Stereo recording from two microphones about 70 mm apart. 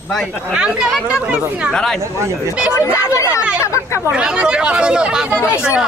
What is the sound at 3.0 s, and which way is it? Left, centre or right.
Speech, left.